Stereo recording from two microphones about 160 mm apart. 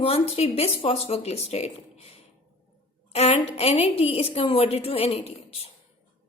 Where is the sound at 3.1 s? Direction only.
40° left (ahead or behind).